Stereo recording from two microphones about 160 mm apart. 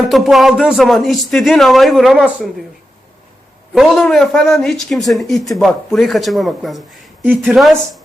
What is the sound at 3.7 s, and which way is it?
Speech, centre (ahead or behind).